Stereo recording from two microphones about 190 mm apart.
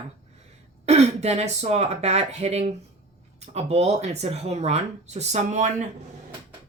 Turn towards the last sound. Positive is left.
turn(degrees=-40)  # may be behind; listen again after turning